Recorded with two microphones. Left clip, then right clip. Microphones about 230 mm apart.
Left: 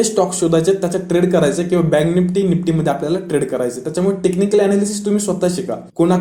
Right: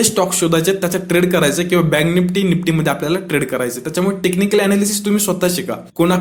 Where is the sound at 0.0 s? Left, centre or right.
Right.